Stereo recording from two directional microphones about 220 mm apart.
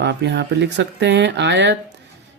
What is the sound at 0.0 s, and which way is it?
Speech, 50° right (ahead or behind).